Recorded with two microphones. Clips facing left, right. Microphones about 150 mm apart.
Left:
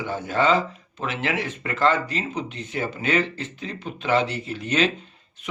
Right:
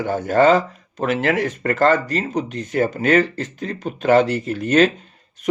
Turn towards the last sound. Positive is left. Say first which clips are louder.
# right 11 dB
turn(degrees=-40)  # may be behind; listen again after turning